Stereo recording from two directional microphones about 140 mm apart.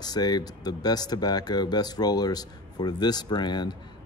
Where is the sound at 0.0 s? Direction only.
30° left (ahead or behind).